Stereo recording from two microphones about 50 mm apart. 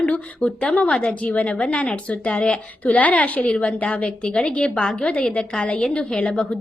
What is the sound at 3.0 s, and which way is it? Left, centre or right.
A woman's voice, left.